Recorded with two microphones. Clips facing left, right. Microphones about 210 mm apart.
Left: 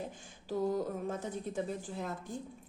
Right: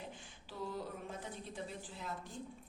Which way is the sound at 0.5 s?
40° left (ahead or behind).